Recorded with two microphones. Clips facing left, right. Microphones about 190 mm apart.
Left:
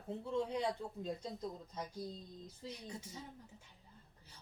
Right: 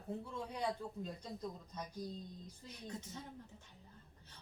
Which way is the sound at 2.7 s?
10° left (ahead or behind).